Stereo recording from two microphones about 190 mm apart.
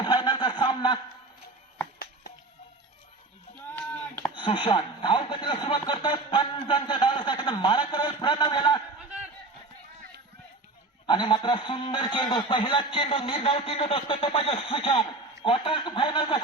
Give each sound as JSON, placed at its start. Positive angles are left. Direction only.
{"t": 0.0, "sound": "a sound", "side_deg": 25}
{"t": 3.7, "sound": "sheep", "side_deg": 10}
{"t": 4.4, "sound": "a man's voice", "side_deg": 25}
{"t": 11.0, "sound": "a man's voice", "side_deg": 25}